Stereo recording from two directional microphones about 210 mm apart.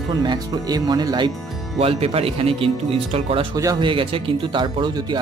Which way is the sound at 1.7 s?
30° right (ahead or behind).